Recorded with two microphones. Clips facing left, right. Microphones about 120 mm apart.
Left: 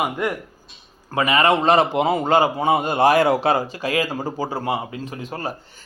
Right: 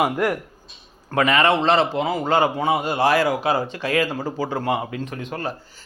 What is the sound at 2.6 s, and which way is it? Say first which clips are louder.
Speech: left 2 dB; 25° left (ahead or behind).